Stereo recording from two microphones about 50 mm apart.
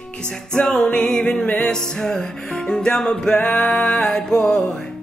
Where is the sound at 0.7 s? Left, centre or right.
Centre.